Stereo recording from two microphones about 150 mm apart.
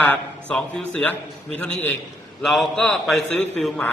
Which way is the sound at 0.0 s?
10° left (ahead or behind).